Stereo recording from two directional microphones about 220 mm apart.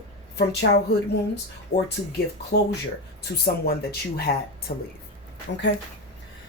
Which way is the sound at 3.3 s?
45° left (ahead or behind).